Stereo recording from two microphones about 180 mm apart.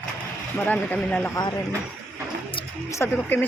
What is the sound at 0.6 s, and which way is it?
Speech, 10° left (ahead or behind).